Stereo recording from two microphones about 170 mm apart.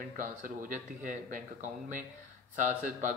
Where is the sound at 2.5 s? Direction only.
50° right (ahead or behind).